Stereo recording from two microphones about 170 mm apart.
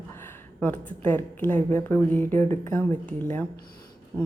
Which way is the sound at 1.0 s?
10° left (ahead or behind).